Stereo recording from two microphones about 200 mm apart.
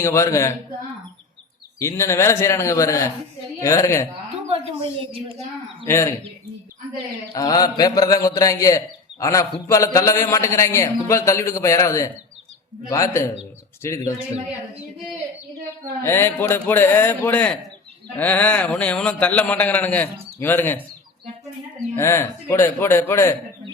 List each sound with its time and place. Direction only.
0.0 s a man's voice: 15° left (ahead or behind)
1.8 s a man's voice: 15° left (ahead or behind)
4.4 s a woman's voice: 25° right (ahead or behind)
5.9 s a man's voice: 15° left (ahead or behind)
7.3 s a man's voice: 20° left (ahead or behind)
16.0 s a man's voice: 10° left (ahead or behind)
21.9 s a man's voice: 15° left (ahead or behind)